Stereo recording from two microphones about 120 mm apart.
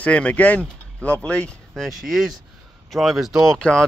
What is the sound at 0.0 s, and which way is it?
Speech, 10° left (ahead or behind).